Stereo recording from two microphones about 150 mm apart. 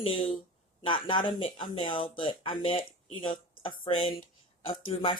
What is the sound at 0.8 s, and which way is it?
Speech, 35° left (ahead or behind).